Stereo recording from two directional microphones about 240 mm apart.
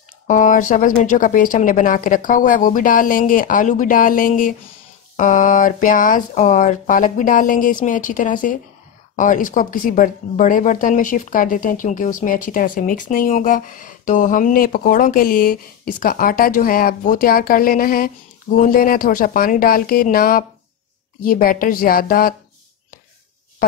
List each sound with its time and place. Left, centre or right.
0.3 s speech: left